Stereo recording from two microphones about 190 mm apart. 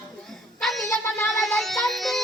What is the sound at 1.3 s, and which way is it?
Music, centre (ahead or behind).